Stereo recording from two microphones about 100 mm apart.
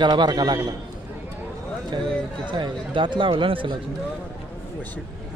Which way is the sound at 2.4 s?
55° right (ahead or behind).